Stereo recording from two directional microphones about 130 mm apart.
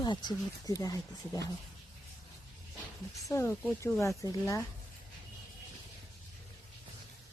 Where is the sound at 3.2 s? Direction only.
20° left (ahead or behind).